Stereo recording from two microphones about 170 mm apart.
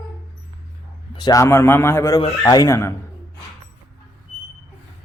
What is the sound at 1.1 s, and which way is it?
A man's voice, 25° left (ahead or behind).